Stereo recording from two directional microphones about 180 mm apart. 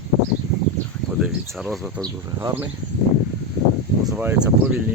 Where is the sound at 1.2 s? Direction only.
Centre (ahead or behind).